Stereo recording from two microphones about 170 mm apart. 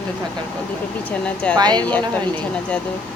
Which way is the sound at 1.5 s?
25° right (ahead or behind).